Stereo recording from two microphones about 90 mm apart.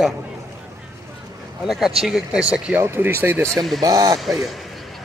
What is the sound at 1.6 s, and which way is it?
A man's voice, 5° right (ahead or behind).